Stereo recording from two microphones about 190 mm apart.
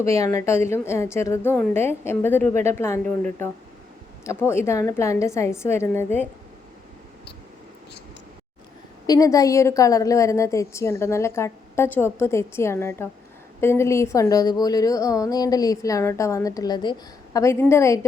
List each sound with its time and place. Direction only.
0.0 s a woman's voice: 15° left (ahead or behind)
9.0 s a woman's voice: 20° left (ahead or behind)